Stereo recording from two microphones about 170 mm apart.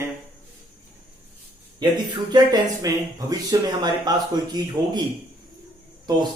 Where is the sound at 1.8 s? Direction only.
25° right (ahead or behind).